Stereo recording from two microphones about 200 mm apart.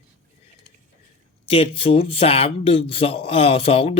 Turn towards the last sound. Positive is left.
turn(degrees=30)  # may be behind; listen again after turning